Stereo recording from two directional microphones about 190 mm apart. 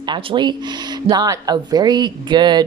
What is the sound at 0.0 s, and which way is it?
Speech, 25° right (ahead or behind).